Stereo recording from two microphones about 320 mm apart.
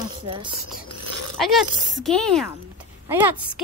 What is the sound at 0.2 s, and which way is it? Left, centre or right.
Speech, centre.